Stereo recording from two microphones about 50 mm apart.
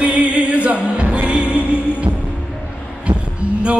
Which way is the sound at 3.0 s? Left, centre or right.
Right.